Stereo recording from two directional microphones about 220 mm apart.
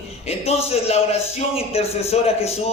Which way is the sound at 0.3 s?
30° left (ahead or behind).